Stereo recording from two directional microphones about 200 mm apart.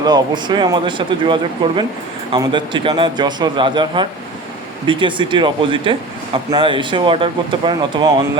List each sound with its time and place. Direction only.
0.0 s speech: 20° right (ahead or behind)